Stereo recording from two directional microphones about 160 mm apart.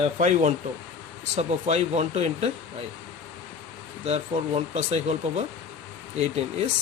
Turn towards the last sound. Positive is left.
turn(degrees=-40)  # may be behind; listen again after turning